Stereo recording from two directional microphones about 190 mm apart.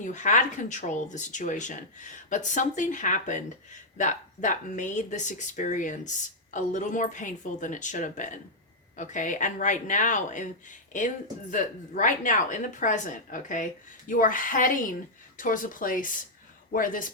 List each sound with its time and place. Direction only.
0.0 s a woman's voice: 40° left (ahead or behind)